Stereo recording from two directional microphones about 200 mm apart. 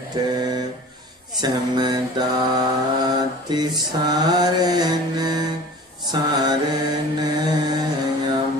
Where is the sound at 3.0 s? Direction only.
20° right (ahead or behind).